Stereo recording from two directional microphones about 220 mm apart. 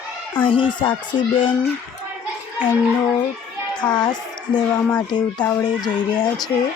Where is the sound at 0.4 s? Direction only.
20° left (ahead or behind).